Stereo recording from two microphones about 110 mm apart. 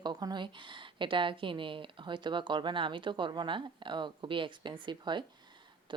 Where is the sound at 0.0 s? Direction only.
40° right (ahead or behind).